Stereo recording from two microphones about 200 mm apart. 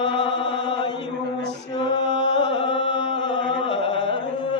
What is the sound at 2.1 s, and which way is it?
Music, 65° left (ahead or behind).